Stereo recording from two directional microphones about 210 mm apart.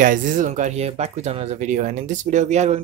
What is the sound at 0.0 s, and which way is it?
Speech, 40° right (ahead or behind).